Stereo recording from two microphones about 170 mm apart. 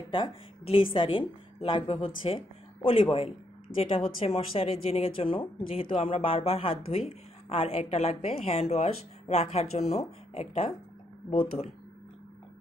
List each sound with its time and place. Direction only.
0.1 s speech: 30° left (ahead or behind)